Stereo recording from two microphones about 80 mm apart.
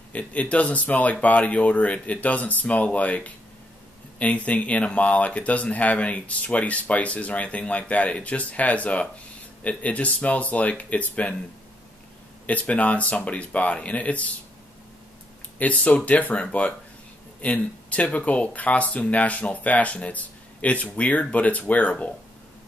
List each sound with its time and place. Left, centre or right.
0.1 s speech: centre
12.4 s speech: centre
15.6 s speech: centre